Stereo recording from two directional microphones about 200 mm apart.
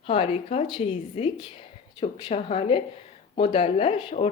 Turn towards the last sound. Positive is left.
turn(degrees=30)  # may be behind; listen again after turning